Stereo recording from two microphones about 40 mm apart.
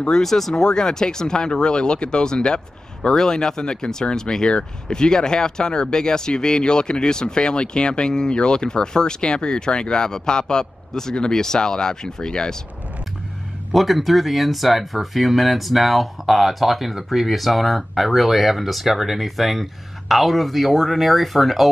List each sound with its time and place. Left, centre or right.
0.1 s speech: centre
0.7 s speech: centre
13.7 s speech: centre